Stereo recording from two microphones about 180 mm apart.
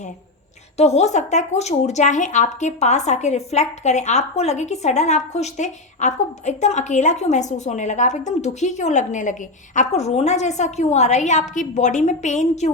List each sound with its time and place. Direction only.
0.8 s a woman's voice: 35° left (ahead or behind)